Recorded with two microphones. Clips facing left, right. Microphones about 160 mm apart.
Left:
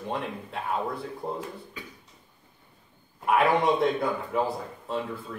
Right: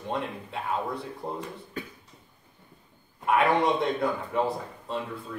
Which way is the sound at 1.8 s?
50° right (ahead or behind).